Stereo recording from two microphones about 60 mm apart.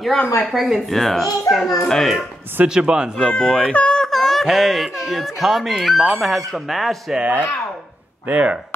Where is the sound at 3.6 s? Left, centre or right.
Left.